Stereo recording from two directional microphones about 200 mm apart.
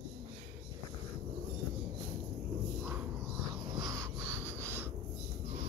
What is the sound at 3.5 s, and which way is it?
Crow, 20° right (ahead or behind).